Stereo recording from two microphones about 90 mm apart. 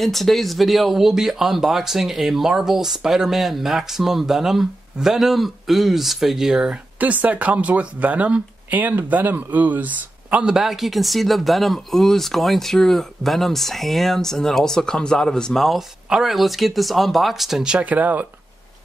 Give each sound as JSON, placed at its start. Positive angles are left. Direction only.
{"t": 0.0, "sound": "speech", "side_deg": 0}